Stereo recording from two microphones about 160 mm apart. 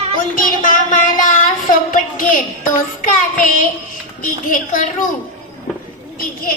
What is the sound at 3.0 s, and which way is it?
A woman's voice, 55° left (ahead or behind).